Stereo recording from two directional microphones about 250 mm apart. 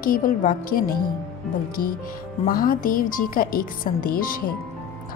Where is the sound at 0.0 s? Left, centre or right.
Left.